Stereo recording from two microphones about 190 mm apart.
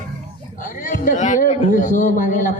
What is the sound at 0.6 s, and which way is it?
A man's voice, 45° left (ahead or behind).